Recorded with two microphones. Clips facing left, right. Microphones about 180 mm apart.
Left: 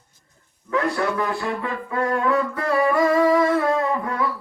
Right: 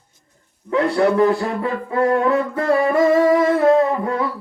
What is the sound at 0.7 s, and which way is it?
Speech, 30° right (ahead or behind).